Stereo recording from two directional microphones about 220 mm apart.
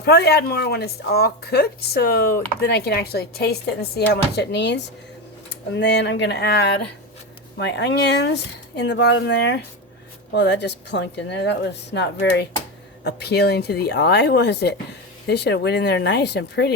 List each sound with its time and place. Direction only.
0.0 s a woman's voice: 50° left (ahead or behind)